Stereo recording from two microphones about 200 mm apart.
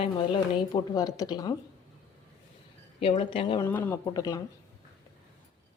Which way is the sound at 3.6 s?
10° left (ahead or behind).